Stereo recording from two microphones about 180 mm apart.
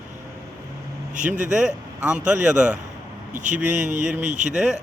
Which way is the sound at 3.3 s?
45° right (ahead or behind).